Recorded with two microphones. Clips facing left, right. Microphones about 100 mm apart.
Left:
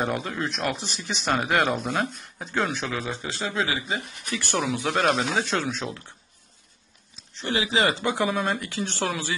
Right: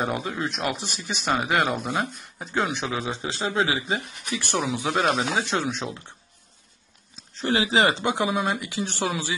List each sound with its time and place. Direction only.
0.0 s speech: 5° right (ahead or behind)
0.7 s speech: 50° right (ahead or behind)
1.2 s speech: 5° right (ahead or behind); by 6.0 s 20° right (ahead or behind)
7.3 s speech: 35° right (ahead or behind); by 9.3 s 15° right (ahead or behind)